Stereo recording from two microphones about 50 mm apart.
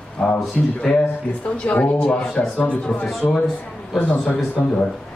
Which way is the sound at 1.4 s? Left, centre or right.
Left.